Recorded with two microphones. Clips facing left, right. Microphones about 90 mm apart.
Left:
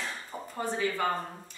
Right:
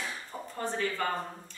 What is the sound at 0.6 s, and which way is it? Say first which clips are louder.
Speech: left 2 dB; 15° left (ahead or behind).